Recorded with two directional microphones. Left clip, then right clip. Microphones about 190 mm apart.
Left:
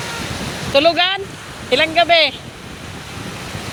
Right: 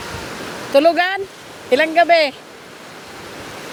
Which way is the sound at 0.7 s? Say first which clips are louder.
Even; 35° right (ahead or behind).